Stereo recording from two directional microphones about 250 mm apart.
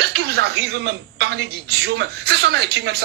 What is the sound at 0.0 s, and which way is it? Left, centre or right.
A man's voice, right.